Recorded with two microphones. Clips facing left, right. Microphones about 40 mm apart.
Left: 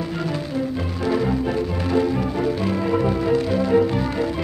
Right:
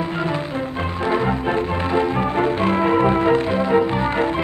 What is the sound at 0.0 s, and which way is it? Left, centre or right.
Music, right.